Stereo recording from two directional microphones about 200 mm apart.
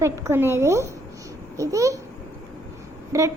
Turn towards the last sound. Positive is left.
turn(degrees=-15)  # may be behind; listen again after turning